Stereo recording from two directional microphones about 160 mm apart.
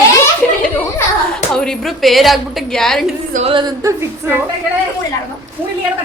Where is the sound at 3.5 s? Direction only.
30° right (ahead or behind).